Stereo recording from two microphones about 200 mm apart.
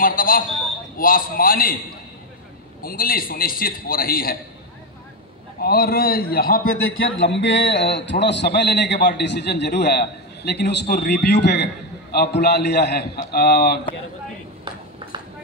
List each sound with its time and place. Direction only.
0.0 s a man's voice: 45° left (ahead or behind)
2.8 s a man's voice: 45° left (ahead or behind)
5.6 s a man's voice: 50° left (ahead or behind)
6.7 s a man's voice: 80° left; by 13.7 s 50° left (ahead or behind)